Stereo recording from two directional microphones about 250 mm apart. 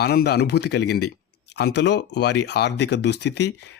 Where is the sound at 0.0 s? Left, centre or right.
Left.